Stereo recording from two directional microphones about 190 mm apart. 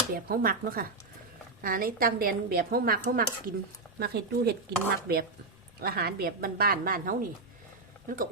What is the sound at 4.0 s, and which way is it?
A woman's voice, 60° right (ahead or behind).